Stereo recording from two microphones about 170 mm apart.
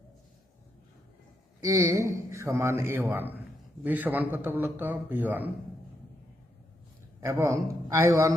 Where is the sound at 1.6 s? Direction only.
20° right (ahead or behind).